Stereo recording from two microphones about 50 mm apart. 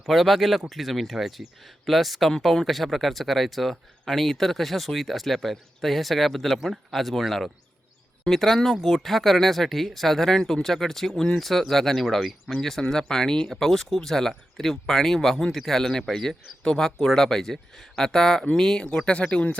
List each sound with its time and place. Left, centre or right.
0.0 s speech: centre; by 19.5 s left